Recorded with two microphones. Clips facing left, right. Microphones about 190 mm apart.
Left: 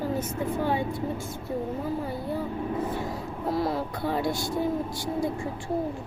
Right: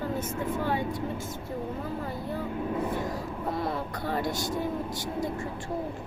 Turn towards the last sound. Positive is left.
turn(degrees=10)  # may be behind; listen again after turning